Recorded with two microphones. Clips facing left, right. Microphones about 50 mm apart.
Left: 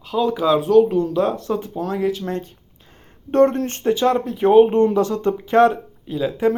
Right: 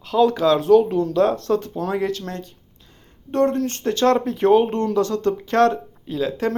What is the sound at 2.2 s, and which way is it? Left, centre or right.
Speech, left.